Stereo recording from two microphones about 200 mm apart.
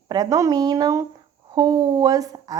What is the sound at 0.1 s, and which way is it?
A woman's voice, 15° right (ahead or behind).